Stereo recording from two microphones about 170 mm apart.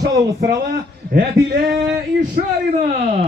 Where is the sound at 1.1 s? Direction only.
60° right (ahead or behind).